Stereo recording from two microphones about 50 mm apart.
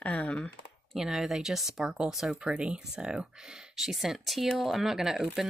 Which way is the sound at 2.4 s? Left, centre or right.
Right.